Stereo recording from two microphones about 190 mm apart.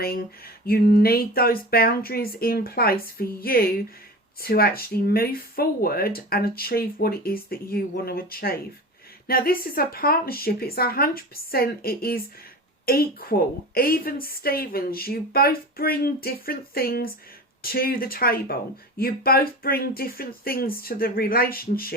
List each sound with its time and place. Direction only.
0.0 s speech: 50° left (ahead or behind)